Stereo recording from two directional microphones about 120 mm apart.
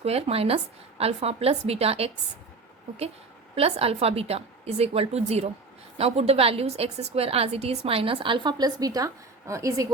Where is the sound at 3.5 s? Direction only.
55° right (ahead or behind).